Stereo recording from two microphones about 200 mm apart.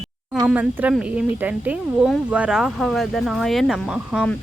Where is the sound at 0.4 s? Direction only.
5° right (ahead or behind).